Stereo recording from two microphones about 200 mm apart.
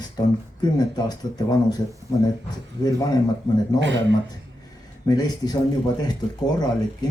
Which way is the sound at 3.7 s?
65° right (ahead or behind).